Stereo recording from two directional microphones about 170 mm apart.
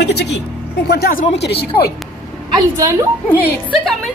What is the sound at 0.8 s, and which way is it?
Speech, 65° left (ahead or behind).